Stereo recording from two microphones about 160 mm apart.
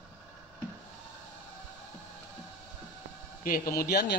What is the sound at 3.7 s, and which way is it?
Speech, 70° left (ahead or behind).